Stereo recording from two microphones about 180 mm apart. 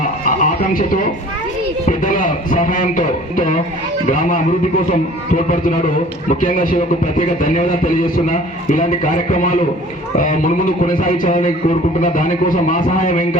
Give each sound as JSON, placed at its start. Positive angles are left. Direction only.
{"t": 0.0, "sound": "a sound", "side_deg": 50}
{"t": 1.9, "sound": "a man's voice", "side_deg": 45}
{"t": 6.2, "sound": "a man's voice", "side_deg": 50}